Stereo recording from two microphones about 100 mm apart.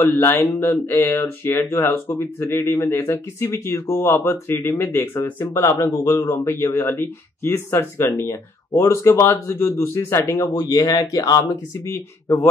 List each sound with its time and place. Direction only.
0.0 s speech: 20° left (ahead or behind)
10.3 s speech: 40° left (ahead or behind)